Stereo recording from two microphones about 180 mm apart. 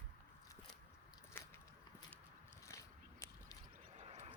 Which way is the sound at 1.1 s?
15° left (ahead or behind).